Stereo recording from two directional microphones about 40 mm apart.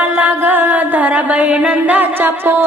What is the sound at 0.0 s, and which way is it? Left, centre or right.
Music, right.